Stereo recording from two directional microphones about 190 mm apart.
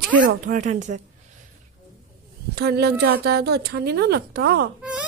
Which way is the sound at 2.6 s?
60° right (ahead or behind).